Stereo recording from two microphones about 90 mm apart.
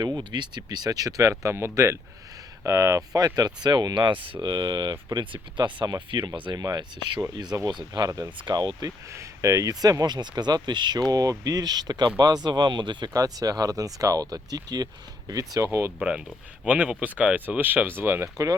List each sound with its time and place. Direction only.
0.2 s speech: 55° right (ahead or behind)
4.4 s speech: 55° right (ahead or behind)
6.6 s speech: 50° right (ahead or behind)
8.4 s speech: 55° right (ahead or behind)
9.0 s speech: 35° right (ahead or behind); by 13.1 s 60° right (ahead or behind)
13.1 s speech: 40° right (ahead or behind)
16.0 s speech: 10° right (ahead or behind); by 18.3 s 25° right (ahead or behind)